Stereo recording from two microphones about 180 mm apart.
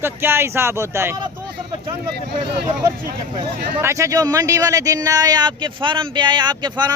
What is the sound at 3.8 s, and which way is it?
Speech, 15° right (ahead or behind).